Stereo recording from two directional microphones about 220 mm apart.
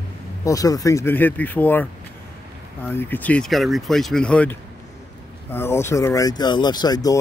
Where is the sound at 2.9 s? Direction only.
10° left (ahead or behind).